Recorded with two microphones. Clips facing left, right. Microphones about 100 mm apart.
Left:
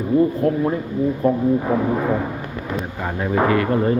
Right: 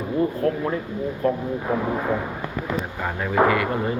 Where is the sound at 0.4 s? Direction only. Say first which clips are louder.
Left 4 dB; 25° left (ahead or behind).